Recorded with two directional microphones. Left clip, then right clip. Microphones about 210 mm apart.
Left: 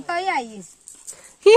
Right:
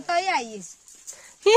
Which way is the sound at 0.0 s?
25° right (ahead or behind).